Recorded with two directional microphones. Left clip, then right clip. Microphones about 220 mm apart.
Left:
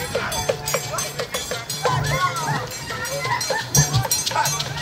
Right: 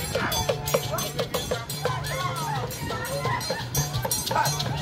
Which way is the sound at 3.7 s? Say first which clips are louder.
Left 8 dB; 15° right (ahead or behind).